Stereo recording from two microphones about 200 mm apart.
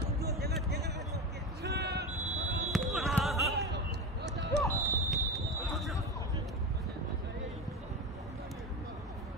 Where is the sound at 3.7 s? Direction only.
60° right (ahead or behind).